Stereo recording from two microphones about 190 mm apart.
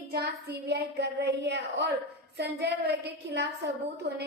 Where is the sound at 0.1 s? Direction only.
55° right (ahead or behind).